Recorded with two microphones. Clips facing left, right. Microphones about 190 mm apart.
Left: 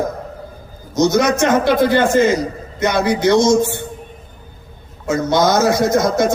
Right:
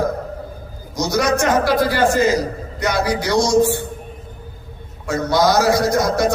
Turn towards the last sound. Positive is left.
turn(degrees=20)  # may be behind; listen again after turning